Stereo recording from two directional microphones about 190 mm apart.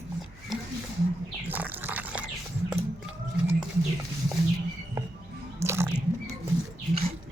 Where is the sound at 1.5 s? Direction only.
10° right (ahead or behind).